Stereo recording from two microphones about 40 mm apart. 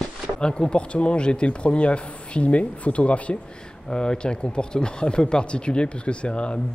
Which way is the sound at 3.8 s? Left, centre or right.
Left.